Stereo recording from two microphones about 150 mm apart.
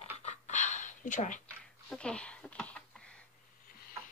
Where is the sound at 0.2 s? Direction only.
55° left (ahead or behind).